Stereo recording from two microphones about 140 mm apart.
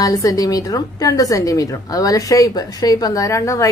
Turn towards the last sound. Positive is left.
turn(degrees=20)  # may be behind; listen again after turning